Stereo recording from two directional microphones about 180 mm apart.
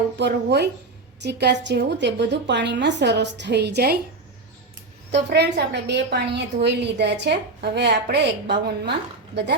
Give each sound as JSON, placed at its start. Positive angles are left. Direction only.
{"t": 0.2, "sound": "a woman's voice", "side_deg": -70}
{"t": 5.1, "sound": "a woman's voice", "side_deg": -70}